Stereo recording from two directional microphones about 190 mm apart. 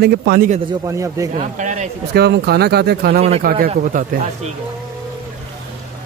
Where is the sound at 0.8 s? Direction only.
15° right (ahead or behind).